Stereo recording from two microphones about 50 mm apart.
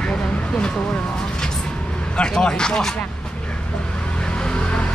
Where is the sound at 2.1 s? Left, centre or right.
Centre.